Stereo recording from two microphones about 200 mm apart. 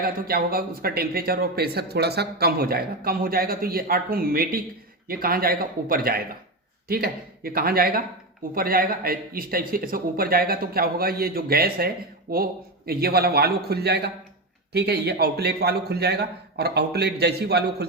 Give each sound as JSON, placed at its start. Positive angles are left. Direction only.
{"t": 0.0, "sound": "a man's voice", "side_deg": -50}